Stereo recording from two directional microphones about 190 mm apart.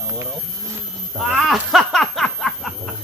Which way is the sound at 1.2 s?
Centre (ahead or behind).